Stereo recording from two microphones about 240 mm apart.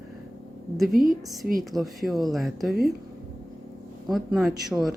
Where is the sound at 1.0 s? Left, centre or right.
Right.